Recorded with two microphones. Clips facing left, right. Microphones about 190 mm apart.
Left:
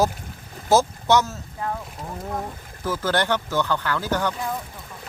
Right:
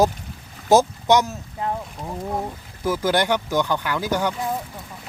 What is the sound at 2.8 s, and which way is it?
Speech, 10° right (ahead or behind).